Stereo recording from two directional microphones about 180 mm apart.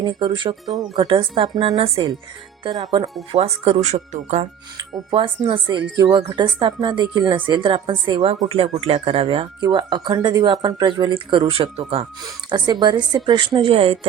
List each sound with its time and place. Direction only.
0.0 s speech: 25° right (ahead or behind)
3.3 s speech: 35° right (ahead or behind)
4.8 s speech: 25° right (ahead or behind)